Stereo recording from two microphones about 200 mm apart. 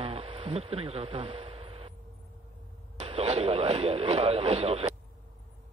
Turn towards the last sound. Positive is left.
turn(degrees=-30)  # may be behind; listen again after turning